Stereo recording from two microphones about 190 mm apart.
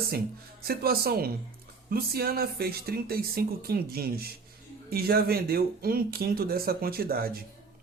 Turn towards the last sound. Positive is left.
turn(degrees=-50)  # may be behind; listen again after turning